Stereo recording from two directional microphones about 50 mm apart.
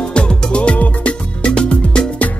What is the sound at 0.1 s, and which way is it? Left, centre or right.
Music, centre.